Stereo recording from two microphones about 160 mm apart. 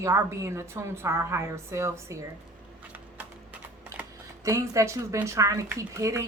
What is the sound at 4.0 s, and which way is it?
A woman's voice, 20° right (ahead or behind).